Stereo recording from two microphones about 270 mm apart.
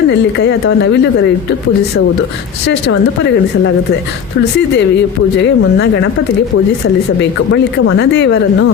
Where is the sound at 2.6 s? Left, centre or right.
Left.